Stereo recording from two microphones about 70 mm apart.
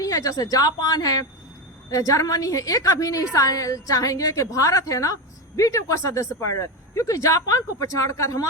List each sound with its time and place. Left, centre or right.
0.0 s a woman's voice: left
1.9 s a woman's voice: left